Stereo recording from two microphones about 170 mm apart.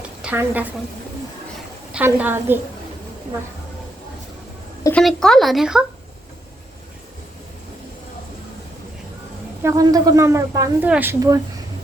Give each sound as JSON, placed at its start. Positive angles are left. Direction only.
{"t": 0.2, "sound": "a woman's voice", "side_deg": -10}
{"t": 1.9, "sound": "speech", "side_deg": -10}
{"t": 4.8, "sound": "a woman's voice", "side_deg": 10}
{"t": 9.6, "sound": "speech", "side_deg": -20}